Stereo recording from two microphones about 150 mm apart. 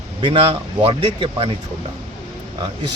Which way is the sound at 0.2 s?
35° right (ahead or behind).